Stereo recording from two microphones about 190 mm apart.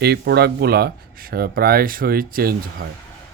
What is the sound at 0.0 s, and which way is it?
Speech, 60° right (ahead or behind).